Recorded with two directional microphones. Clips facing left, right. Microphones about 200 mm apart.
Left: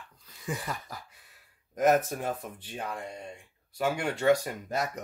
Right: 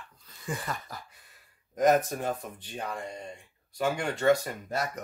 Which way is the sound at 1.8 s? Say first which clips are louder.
Right 1 dB; 5° left (ahead or behind).